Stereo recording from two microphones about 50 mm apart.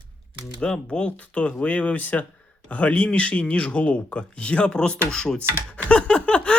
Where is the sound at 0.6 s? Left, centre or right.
Centre.